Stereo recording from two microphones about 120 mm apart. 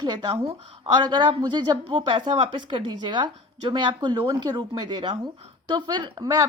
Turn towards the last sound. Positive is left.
turn(degrees=-35)  # may be behind; listen again after turning